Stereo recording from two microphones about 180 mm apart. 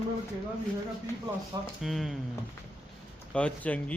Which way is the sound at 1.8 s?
Centre (ahead or behind).